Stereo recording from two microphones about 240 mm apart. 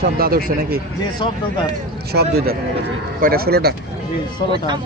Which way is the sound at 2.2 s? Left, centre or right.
Right.